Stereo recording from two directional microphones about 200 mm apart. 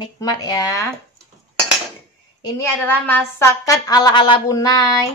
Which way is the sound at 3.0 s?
10° left (ahead or behind).